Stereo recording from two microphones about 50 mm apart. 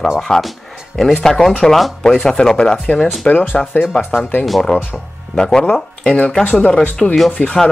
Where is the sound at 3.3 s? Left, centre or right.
Left.